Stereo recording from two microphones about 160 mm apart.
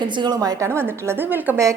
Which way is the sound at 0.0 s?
30° right (ahead or behind).